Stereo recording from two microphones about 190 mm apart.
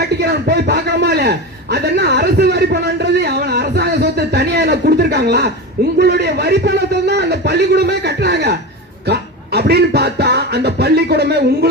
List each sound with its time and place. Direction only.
0.0 s a man's voice: 60° right (ahead or behind)